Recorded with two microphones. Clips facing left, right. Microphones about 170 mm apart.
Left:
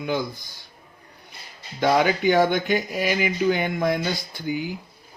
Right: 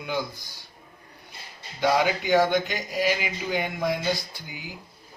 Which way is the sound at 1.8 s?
50° left (ahead or behind).